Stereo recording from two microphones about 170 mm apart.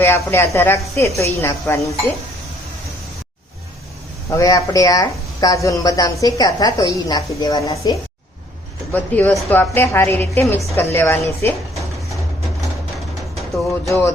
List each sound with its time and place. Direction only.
0.0 s a woman's voice: 15° left (ahead or behind)
4.3 s speech: 20° left (ahead or behind)
8.9 s a woman's voice: 10° left (ahead or behind)
13.8 s a woman's voice: 15° left (ahead or behind)